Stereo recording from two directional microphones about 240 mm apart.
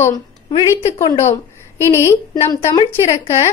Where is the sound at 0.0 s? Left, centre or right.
Centre.